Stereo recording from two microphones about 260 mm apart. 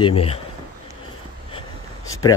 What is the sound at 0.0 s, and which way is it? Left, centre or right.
Speech, left.